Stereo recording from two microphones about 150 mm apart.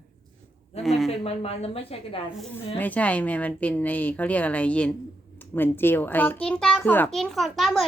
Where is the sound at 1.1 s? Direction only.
40° left (ahead or behind).